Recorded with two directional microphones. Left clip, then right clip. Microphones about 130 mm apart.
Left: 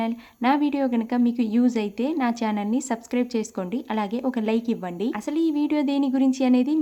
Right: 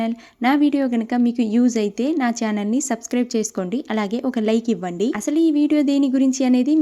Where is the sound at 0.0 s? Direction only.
30° right (ahead or behind).